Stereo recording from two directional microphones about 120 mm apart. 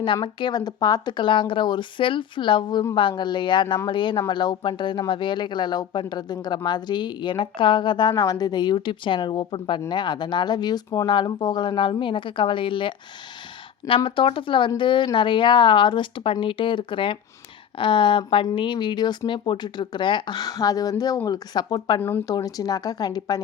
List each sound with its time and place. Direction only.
0.0 s speech: 40° left (ahead or behind)